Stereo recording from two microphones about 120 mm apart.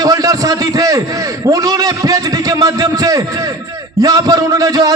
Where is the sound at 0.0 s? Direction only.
30° right (ahead or behind).